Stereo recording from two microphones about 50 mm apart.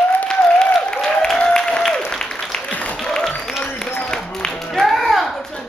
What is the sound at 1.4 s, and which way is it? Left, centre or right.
Applause, centre.